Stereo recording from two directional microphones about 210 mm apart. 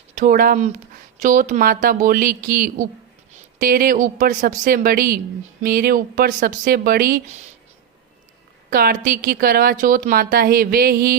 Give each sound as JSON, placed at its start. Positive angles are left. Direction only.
{"t": 0.2, "sound": "speech", "side_deg": -40}
{"t": 8.7, "sound": "speech", "side_deg": -45}